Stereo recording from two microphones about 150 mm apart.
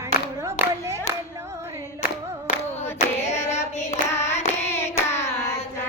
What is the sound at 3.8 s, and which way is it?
Hands, 50° left (ahead or behind).